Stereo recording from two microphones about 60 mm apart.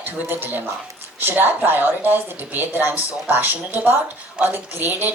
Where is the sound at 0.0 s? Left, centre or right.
Right.